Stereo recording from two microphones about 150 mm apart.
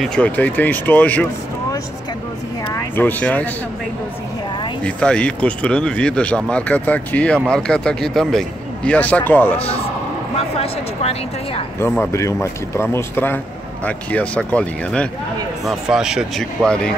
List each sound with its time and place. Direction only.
0.0 s speech: 5° left (ahead or behind)
2.7 s speech: 15° left (ahead or behind)
4.8 s speech: 5° left (ahead or behind)
10.6 s speech: 40° left (ahead or behind)
12.1 s speech: 20° left (ahead or behind)
15.6 s speech: 5° right (ahead or behind)
16.6 s speech: 5° left (ahead or behind)